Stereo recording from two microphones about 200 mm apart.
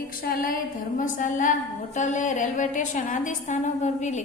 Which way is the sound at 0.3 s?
45° left (ahead or behind).